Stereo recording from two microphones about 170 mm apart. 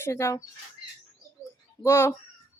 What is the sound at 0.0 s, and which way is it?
Speech, 15° left (ahead or behind).